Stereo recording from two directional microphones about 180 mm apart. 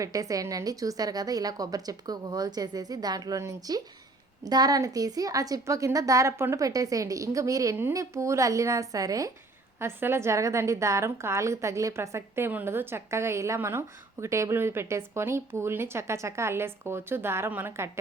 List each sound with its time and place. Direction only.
0.0 s a woman's voice: 20° right (ahead or behind)